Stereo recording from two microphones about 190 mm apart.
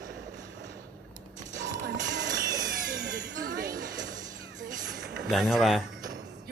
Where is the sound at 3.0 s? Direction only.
55° right (ahead or behind).